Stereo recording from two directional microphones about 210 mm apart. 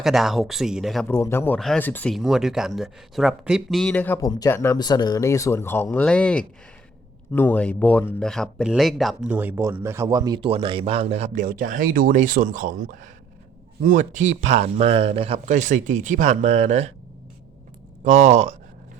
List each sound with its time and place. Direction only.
0.0 s speech: centre (ahead or behind)
1.0 s speech: 10° left (ahead or behind); by 16.9 s 35° right (ahead or behind)
18.0 s speech: 35° right (ahead or behind)